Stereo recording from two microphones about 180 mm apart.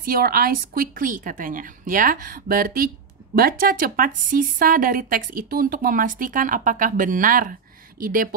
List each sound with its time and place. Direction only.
0.0 s a woman's voice: 55° right (ahead or behind)